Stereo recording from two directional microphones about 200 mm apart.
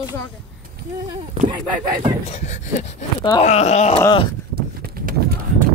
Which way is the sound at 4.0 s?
20° left (ahead or behind).